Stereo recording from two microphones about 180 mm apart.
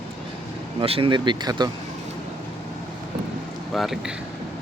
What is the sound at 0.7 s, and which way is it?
Speech, 30° right (ahead or behind).